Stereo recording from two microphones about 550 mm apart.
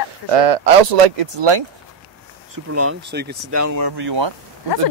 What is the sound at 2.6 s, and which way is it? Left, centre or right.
Speech, right.